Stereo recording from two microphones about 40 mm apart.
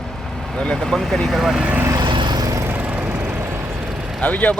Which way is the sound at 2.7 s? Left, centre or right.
Right.